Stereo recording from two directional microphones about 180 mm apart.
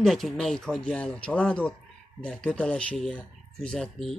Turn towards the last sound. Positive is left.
turn(degrees=5)  # may be behind; listen again after turning